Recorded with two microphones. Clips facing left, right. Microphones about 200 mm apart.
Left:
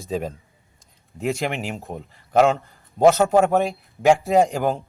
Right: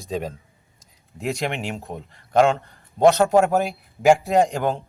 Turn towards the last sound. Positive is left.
turn(degrees=0)  # may be behind; listen again after turning